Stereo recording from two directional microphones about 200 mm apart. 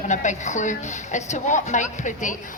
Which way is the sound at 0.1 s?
35° left (ahead or behind).